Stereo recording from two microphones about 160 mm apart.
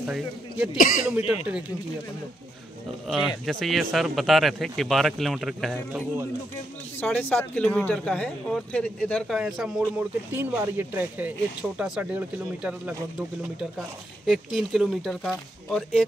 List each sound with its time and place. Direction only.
0.0 s speech: 5° right (ahead or behind)
0.7 s a man's voice: 60° left (ahead or behind)
1.1 s speech: 10° right (ahead or behind)
3.1 s speech: 5° left (ahead or behind)
7.0 s speech: 10° left (ahead or behind)
9.4 s speech: 5° right (ahead or behind)
14.2 s speech: centre (ahead or behind)